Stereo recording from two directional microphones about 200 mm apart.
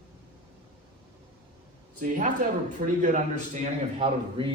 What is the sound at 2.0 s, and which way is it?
Speech, 40° right (ahead or behind).